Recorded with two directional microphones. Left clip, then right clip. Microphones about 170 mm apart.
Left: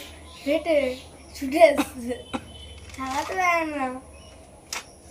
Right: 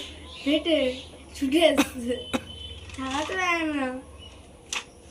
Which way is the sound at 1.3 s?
30° left (ahead or behind).